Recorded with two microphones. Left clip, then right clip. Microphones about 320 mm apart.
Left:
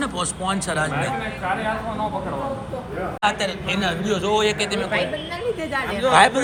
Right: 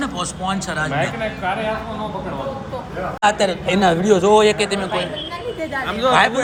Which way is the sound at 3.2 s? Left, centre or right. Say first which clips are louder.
Right 6 dB; right.